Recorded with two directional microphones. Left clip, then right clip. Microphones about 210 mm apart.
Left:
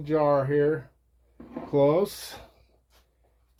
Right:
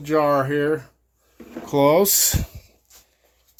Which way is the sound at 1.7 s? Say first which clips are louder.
Right 6 dB; 60° right (ahead or behind).